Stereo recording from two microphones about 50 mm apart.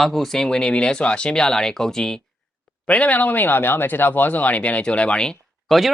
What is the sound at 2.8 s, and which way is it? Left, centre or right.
Speech, left.